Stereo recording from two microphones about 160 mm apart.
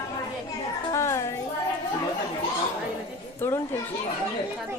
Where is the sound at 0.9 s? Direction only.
20° left (ahead or behind).